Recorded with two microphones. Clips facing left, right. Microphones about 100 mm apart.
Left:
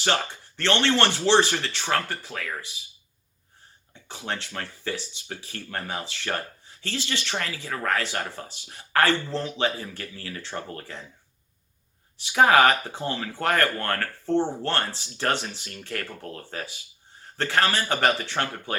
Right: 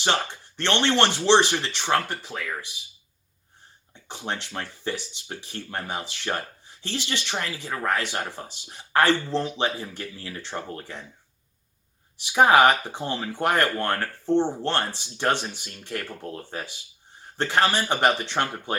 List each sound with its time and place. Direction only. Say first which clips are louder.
0.0 s speech: right 1 dB; 20° right (ahead or behind)
4.1 s speech: right 1 dB; 20° right (ahead or behind)
12.2 s speech: right 1 dB; 20° right (ahead or behind)